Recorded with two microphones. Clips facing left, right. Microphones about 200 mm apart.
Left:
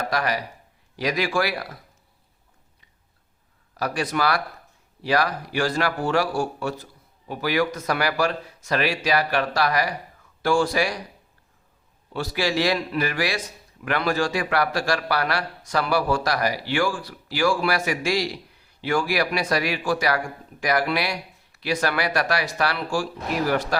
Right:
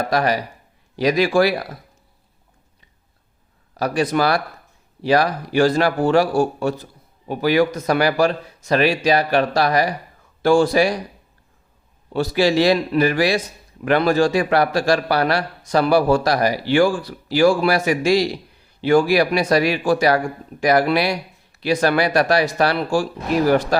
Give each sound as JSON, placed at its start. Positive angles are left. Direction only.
{"t": 0.1, "sound": "a man's voice", "side_deg": -30}
{"t": 3.8, "sound": "a man's voice", "side_deg": -25}
{"t": 12.1, "sound": "a man's voice", "side_deg": -25}